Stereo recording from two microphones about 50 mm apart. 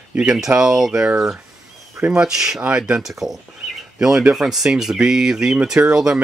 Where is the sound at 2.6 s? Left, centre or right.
Right.